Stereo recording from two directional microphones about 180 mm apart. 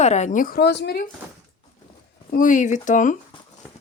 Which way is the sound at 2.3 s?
50° left (ahead or behind).